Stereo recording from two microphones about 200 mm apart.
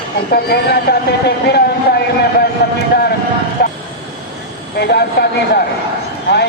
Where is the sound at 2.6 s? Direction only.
55° left (ahead or behind).